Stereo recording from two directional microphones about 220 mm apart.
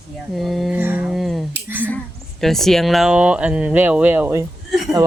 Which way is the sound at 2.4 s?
Centre (ahead or behind).